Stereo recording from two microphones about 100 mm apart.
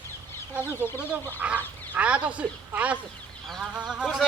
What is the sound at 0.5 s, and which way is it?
Speech, 20° right (ahead or behind).